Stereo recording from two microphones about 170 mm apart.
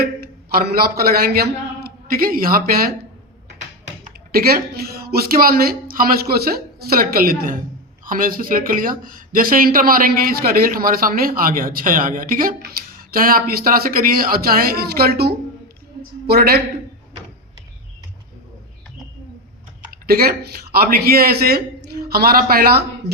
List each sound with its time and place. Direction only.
0.5 s a man's voice: 65° right (ahead or behind)
4.3 s a woman's voice: 60° right (ahead or behind)
20.1 s speech: 60° right (ahead or behind)